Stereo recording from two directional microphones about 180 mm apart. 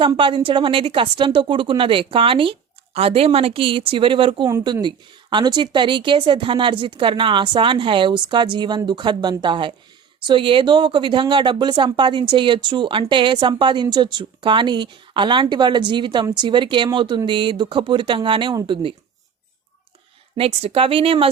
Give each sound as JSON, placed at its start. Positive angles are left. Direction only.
{"t": 0.0, "sound": "a woman's voice", "side_deg": -30}
{"t": 20.3, "sound": "speech", "side_deg": -30}